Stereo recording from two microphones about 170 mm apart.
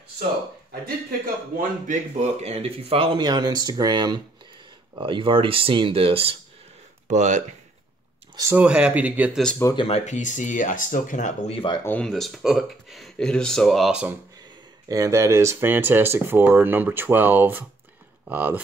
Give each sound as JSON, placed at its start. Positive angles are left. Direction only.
{"t": 1.6, "sound": "speech", "side_deg": -45}
{"t": 7.1, "sound": "speech", "side_deg": -45}
{"t": 8.4, "sound": "speech", "side_deg": -10}
{"t": 9.8, "sound": "speech", "side_deg": 35}
{"t": 11.8, "sound": "speech", "side_deg": 5}
{"t": 14.9, "sound": "speech", "side_deg": -20}